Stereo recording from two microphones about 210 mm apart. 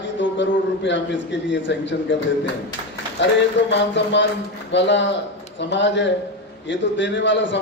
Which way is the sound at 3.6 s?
55° left (ahead or behind).